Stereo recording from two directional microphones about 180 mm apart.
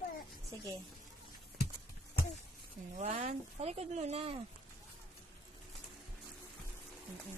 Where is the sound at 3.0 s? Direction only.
45° right (ahead or behind).